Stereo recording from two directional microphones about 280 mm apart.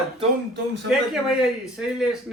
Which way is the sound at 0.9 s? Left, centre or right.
Centre.